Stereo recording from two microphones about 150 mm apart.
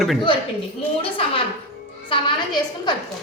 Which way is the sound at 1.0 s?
40° left (ahead or behind).